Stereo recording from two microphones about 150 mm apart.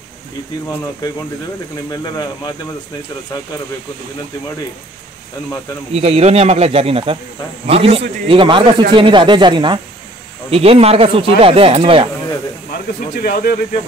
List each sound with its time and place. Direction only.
1.9 s speech: 25° left (ahead or behind)
5.9 s speech: 45° right (ahead or behind)
10.5 s speech: 40° right (ahead or behind)
13.1 s speech: 85° left